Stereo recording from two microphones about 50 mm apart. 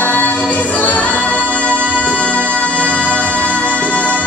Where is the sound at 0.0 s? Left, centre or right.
Left.